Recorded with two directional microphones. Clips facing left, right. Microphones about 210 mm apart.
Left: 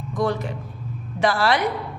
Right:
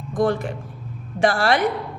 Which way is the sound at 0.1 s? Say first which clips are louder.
Right 3 dB; 50° right (ahead or behind).